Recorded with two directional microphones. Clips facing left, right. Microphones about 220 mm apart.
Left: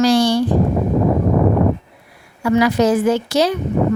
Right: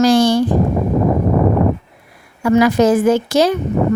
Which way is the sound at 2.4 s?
50° right (ahead or behind).